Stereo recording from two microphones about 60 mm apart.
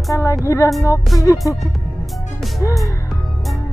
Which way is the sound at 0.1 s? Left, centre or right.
Left.